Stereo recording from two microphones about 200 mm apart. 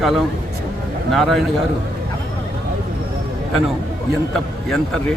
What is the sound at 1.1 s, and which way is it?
Speech, centre (ahead or behind).